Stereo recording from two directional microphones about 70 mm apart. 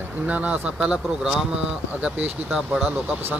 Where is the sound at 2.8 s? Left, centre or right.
Right.